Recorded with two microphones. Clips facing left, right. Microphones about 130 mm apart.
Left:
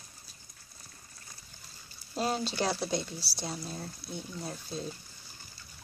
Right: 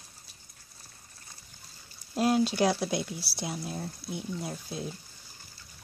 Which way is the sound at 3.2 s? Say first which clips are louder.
Right 3 dB; 55° right (ahead or behind).